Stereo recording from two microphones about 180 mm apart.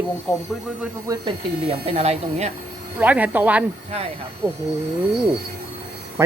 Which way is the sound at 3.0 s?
10° right (ahead or behind).